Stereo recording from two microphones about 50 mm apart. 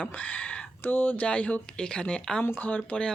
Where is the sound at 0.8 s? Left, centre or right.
Left.